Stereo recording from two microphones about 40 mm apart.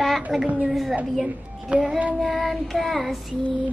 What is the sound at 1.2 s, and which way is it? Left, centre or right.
Child singing, right.